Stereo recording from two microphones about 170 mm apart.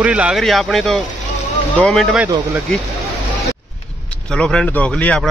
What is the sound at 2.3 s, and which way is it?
Speech, 20° right (ahead or behind).